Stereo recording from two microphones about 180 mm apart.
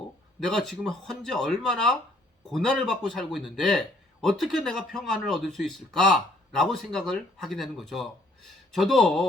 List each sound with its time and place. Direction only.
0.3 s speech: centre (ahead or behind)